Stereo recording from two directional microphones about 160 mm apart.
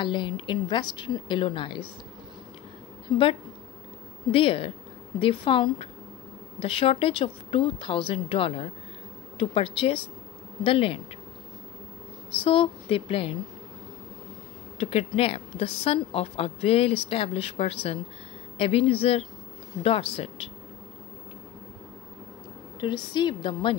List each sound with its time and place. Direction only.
0.0 s a woman's voice: 30° left (ahead or behind)
4.3 s speech: 35° left (ahead or behind)
12.3 s speech: 35° left (ahead or behind)
14.8 s speech: 40° left (ahead or behind)
22.8 s a woman's voice: 30° left (ahead or behind)